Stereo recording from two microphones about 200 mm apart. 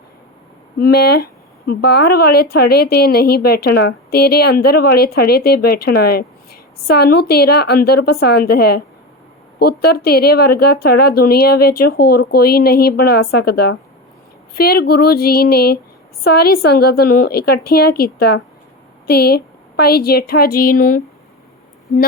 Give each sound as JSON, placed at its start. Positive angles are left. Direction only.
{"t": 0.8, "sound": "speech", "side_deg": 50}